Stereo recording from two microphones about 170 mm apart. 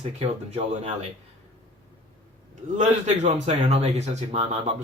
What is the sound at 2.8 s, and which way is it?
Speech, 40° right (ahead or behind).